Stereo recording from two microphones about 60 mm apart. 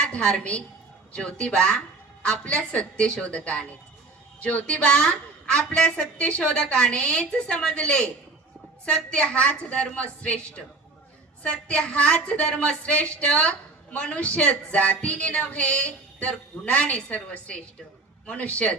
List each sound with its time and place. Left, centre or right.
0.0 s a woman's voice: centre
11.7 s a woman's voice: left